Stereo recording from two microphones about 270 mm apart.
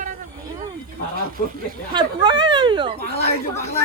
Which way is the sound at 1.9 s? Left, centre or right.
Centre.